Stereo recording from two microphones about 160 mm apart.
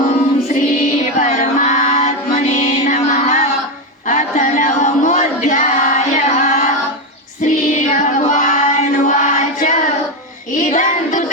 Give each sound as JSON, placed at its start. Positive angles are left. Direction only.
{"t": 0.0, "sound": "music", "side_deg": 50}
{"t": 7.4, "sound": "choir", "side_deg": 50}
{"t": 10.6, "sound": "child singing", "side_deg": 50}